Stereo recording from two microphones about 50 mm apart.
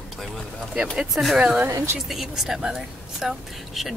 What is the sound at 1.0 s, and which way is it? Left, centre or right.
Speech, centre.